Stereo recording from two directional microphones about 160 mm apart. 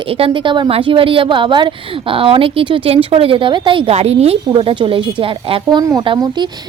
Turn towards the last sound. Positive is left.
turn(degrees=-30)  # may be behind; listen again after turning